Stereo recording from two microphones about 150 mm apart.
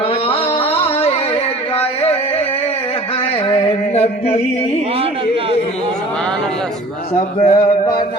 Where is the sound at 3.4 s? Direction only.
35° left (ahead or behind).